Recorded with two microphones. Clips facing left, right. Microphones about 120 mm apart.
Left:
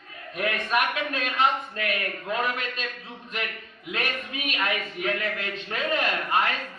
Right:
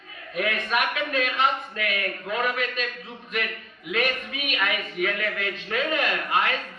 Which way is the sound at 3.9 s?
35° left (ahead or behind).